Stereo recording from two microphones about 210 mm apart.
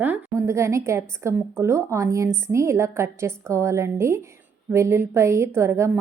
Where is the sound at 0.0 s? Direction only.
10° right (ahead or behind).